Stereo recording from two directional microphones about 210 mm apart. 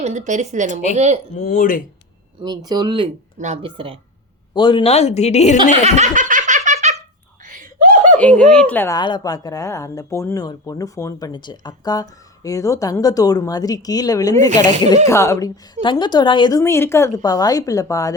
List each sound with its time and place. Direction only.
0.0 s speech: 35° right (ahead or behind)
1.5 s speech: 40° left (ahead or behind)
2.6 s speech: 20° right (ahead or behind)
3.3 s speech: 35° right (ahead or behind)
4.5 s speech: 25° left (ahead or behind)
5.7 s laughter: 30° right (ahead or behind)
7.4 s a sound: 40° right (ahead or behind)
8.4 s a woman's voice: 5° left (ahead or behind)